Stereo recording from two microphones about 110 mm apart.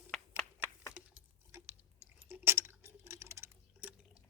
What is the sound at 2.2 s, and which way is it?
Clock, 20° right (ahead or behind).